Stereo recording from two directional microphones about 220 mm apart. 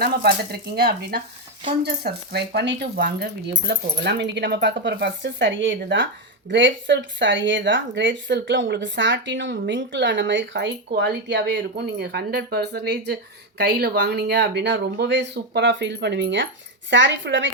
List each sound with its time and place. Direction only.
0.0 s speech: 45° right (ahead or behind)